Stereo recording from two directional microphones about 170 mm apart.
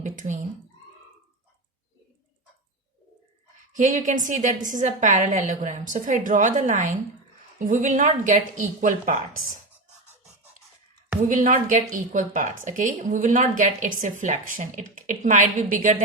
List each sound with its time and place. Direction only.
0.0 s cat: 50° right (ahead or behind)
3.7 s a woman's voice: 50° right (ahead or behind)
11.2 s a woman's voice: 50° right (ahead or behind)